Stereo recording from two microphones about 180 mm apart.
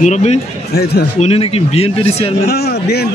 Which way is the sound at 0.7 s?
65° left (ahead or behind).